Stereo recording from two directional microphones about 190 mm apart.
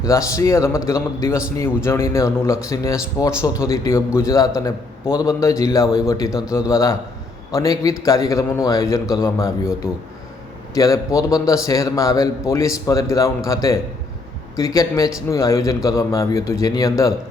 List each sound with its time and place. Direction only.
0.0 s a man's voice: 15° left (ahead or behind)